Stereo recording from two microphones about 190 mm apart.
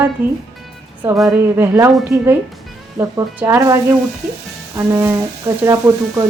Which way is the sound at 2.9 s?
15° right (ahead or behind).